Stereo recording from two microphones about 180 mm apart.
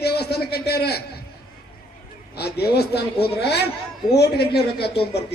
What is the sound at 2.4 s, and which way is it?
A man's voice, 65° left (ahead or behind).